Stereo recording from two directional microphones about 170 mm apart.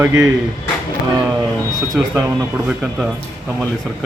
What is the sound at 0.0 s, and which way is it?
Speech, 15° right (ahead or behind).